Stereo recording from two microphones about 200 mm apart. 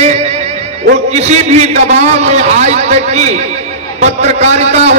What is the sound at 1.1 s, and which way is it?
A man's voice, 35° right (ahead or behind).